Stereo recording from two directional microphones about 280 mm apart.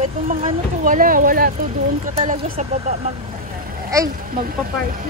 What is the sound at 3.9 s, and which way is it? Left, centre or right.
Speech, centre.